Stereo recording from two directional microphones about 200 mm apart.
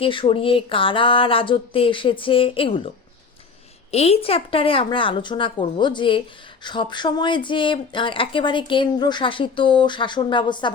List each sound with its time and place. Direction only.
0.0 s a woman's voice: 25° left (ahead or behind)
3.9 s a woman's voice: 30° left (ahead or behind)